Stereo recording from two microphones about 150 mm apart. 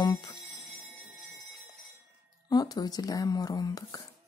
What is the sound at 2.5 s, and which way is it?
A woman's voice, 25° left (ahead or behind).